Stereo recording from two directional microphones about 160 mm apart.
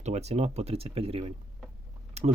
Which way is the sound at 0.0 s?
45° right (ahead or behind).